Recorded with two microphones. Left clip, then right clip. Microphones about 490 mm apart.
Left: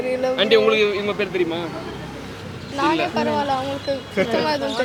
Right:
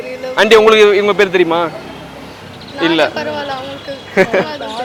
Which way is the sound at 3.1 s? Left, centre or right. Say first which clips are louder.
Right 1 dB; left.